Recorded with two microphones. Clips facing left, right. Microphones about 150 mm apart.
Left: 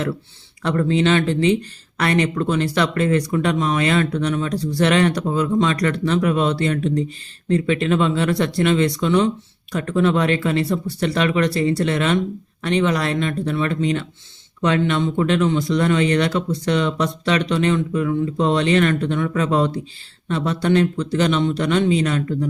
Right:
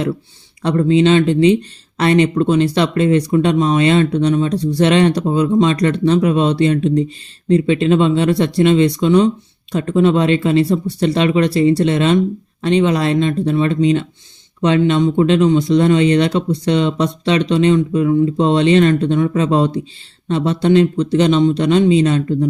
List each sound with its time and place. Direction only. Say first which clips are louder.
0.6 s speech: right 5 dB; 20° right (ahead or behind)